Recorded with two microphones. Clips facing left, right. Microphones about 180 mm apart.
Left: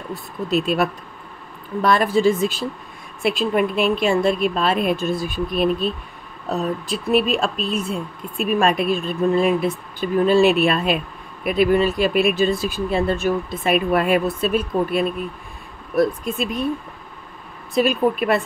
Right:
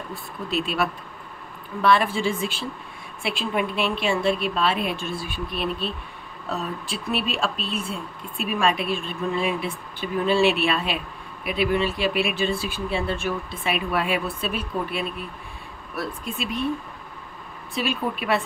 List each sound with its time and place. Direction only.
0.5 s speech: 45° left (ahead or behind)
6.9 s speech: 45° left (ahead or behind)
17.7 s speech: 45° left (ahead or behind)